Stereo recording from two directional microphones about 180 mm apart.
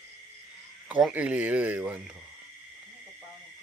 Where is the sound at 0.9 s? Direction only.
5° right (ahead or behind).